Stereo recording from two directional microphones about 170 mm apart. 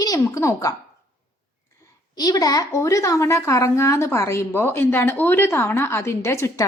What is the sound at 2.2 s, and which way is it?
A woman's voice, 20° left (ahead or behind).